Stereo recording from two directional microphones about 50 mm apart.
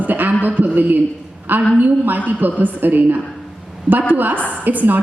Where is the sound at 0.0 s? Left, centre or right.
Right.